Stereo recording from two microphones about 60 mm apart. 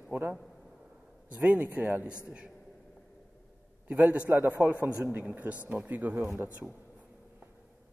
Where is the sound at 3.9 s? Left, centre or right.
Right.